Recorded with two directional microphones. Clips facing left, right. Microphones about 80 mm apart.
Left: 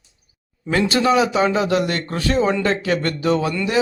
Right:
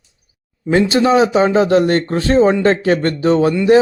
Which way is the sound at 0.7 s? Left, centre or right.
Right.